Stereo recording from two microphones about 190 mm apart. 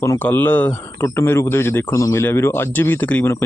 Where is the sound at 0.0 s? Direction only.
10° left (ahead or behind).